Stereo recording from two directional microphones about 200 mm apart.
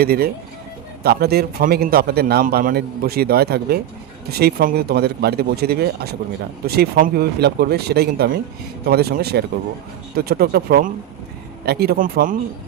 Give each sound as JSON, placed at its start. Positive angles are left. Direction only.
{"t": 0.0, "sound": "a man's voice", "side_deg": -50}